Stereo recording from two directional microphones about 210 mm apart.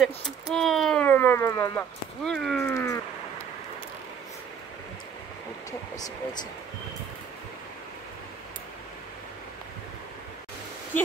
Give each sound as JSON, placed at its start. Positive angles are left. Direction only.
{"t": 0.0, "sound": "speech", "side_deg": 0}
{"t": 2.7, "sound": "speech", "side_deg": 15}
{"t": 5.7, "sound": "speech", "side_deg": 15}